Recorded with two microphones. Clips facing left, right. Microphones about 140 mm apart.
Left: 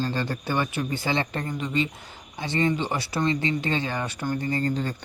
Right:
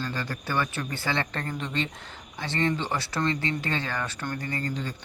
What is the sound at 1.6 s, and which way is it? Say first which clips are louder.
Speech: left 4 dB; 5° left (ahead or behind).